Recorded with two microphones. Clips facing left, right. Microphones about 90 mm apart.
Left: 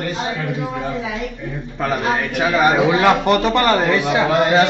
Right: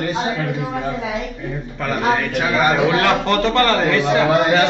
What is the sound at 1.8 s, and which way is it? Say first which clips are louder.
A man's voice: right 1 dB; 20° left (ahead or behind).